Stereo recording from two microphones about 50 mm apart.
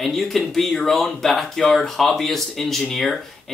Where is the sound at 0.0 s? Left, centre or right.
Centre.